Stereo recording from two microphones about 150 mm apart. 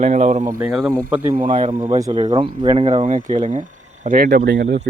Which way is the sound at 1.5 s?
60° right (ahead or behind).